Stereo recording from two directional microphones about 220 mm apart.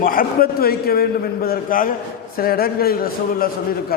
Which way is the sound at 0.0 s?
40° left (ahead or behind).